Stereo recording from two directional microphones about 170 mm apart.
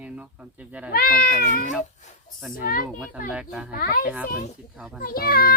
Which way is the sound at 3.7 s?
55° left (ahead or behind).